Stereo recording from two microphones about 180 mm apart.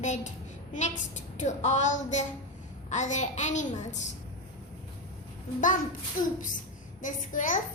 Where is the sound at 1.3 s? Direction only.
40° left (ahead or behind).